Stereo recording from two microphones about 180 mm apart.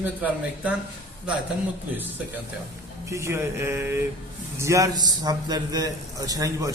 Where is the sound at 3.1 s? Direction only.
15° right (ahead or behind).